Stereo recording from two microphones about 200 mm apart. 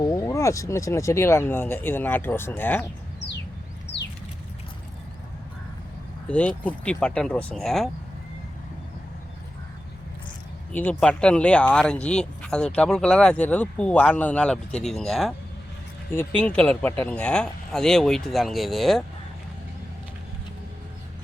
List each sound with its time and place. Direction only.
0.0 s speech: 15° left (ahead or behind)
3.9 s a sound: 55° left (ahead or behind)
6.2 s speech: 5° left (ahead or behind)
10.7 s speech: 10° left (ahead or behind)